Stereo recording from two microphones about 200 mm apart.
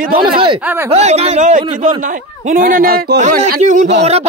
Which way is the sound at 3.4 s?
35° right (ahead or behind).